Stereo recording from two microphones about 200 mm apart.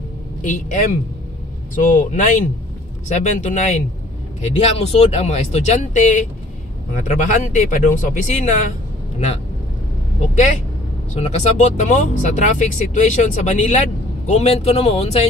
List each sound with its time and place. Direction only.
0.4 s speech: 40° left (ahead or behind)
10.2 s speech: 35° left (ahead or behind)